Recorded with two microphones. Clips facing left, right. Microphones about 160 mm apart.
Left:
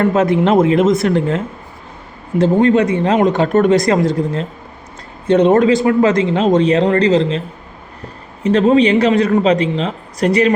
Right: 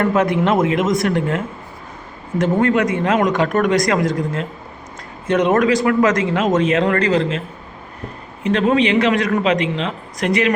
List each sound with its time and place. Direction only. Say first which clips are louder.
0.0 s speech: left 3 dB; 30° left (ahead or behind)
2.5 s a man's voice: left 4 dB; 20° left (ahead or behind)
5.5 s a man's voice: left 1 dB; 25° left (ahead or behind)
8.4 s speech: left 5 dB; 35° left (ahead or behind)